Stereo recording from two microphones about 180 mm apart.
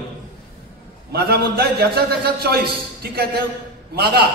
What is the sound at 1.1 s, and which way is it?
A man's voice, 60° right (ahead or behind).